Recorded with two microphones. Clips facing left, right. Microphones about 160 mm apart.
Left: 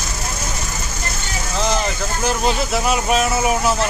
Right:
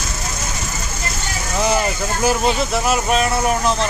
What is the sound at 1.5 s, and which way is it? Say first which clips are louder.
Speech: right 2 dB; 10° right (ahead or behind).